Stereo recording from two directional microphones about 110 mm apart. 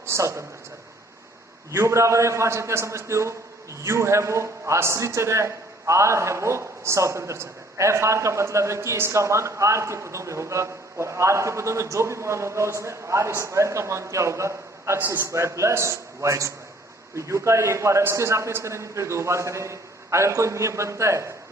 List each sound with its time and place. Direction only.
0.0 s a man's voice: 25° right (ahead or behind)
1.7 s a man's voice: 25° right (ahead or behind)